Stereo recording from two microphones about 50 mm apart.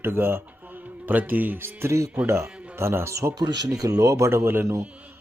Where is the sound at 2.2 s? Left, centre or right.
Right.